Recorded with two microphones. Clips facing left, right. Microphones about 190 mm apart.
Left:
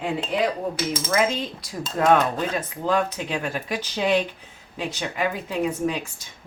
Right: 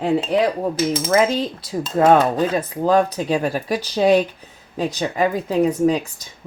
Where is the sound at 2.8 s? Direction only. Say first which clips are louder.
Right 7 dB; 40° right (ahead or behind).